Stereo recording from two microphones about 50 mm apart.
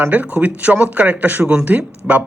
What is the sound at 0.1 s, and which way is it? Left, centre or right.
A man's voice, right.